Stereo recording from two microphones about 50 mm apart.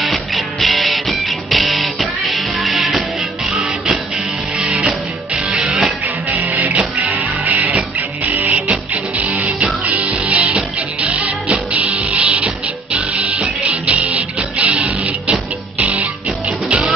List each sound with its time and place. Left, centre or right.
0.0 s music: centre
5.5 s music: centre
6.3 s music: right
16.6 s music: centre